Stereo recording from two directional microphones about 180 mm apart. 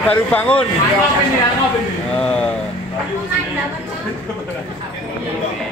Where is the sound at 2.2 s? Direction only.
5° left (ahead or behind).